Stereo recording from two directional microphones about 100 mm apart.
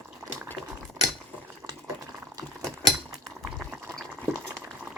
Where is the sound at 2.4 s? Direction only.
40° right (ahead or behind).